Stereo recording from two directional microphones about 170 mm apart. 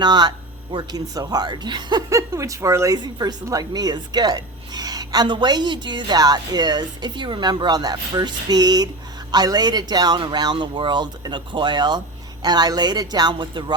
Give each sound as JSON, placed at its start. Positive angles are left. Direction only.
{"t": 0.0, "sound": "speech", "side_deg": -25}